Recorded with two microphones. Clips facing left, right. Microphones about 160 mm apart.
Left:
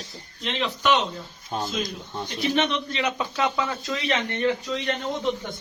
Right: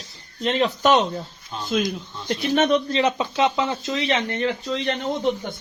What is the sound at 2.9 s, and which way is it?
Speech, 25° right (ahead or behind).